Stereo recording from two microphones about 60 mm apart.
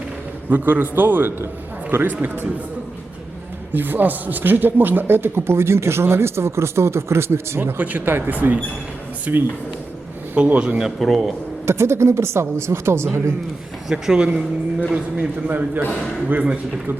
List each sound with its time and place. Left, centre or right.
0.5 s a man's voice: right
3.7 s a man's voice: right
10.8 s a man's voice: centre
11.6 s a woman's voice: right
13.8 s speech: centre
15.4 s a man's voice: right
16.3 s speech: centre